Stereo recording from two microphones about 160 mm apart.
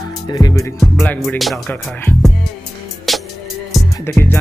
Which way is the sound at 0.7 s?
5° left (ahead or behind).